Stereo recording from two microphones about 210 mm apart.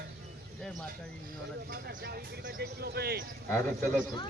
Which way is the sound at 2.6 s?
50° right (ahead or behind).